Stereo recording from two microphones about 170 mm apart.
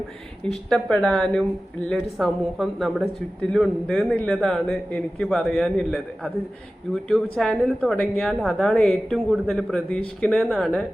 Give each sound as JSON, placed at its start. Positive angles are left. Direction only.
{"t": 0.4, "sound": "a woman's voice", "side_deg": 5}